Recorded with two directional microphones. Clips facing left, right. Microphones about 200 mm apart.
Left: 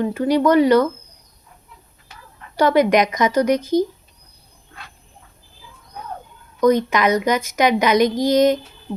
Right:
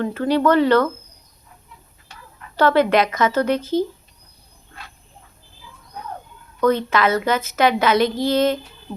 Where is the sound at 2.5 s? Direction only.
15° left (ahead or behind).